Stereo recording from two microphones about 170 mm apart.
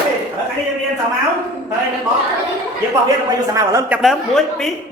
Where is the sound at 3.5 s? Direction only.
20° right (ahead or behind).